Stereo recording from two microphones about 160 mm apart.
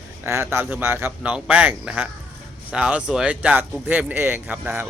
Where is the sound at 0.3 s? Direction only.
15° right (ahead or behind).